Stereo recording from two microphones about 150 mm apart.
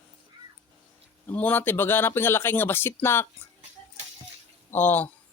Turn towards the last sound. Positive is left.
turn(degrees=15)  # may be behind; listen again after turning